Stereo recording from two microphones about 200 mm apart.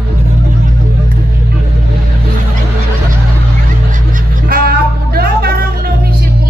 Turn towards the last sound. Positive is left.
turn(degrees=-50)  # may be behind; listen again after turning